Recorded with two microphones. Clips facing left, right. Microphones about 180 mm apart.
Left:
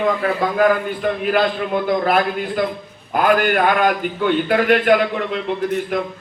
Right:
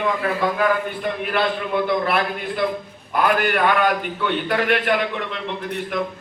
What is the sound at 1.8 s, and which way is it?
A man's voice, 40° left (ahead or behind).